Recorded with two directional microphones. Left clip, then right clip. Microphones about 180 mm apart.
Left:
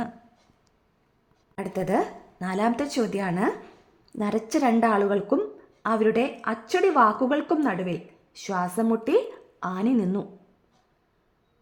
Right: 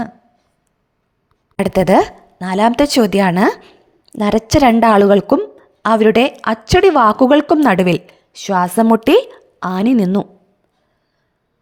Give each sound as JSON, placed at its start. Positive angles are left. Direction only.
{"t": 1.5, "sound": "a woman's voice", "side_deg": -55}
{"t": 8.3, "sound": "a woman's voice", "side_deg": -45}
{"t": 9.2, "sound": "a woman's voice", "side_deg": -40}